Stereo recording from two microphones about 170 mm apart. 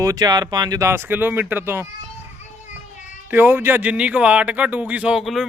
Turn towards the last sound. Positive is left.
turn(degrees=0)  # may be behind; listen again after turning